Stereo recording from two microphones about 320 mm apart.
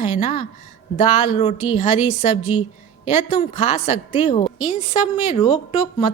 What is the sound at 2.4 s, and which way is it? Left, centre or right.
Speech, left.